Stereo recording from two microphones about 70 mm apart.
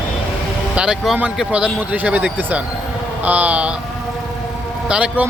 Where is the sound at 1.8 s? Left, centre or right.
Right.